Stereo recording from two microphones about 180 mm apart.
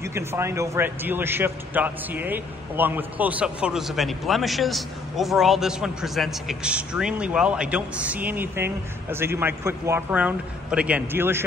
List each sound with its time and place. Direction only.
0.0 s a man's voice: 15° right (ahead or behind)